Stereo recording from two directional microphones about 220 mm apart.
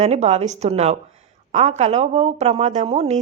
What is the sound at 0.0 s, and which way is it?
A woman's voice, 30° right (ahead or behind).